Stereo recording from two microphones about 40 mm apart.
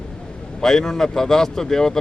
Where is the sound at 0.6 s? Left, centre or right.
Centre.